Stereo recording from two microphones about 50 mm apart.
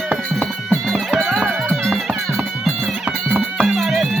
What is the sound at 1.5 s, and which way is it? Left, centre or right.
Music, right.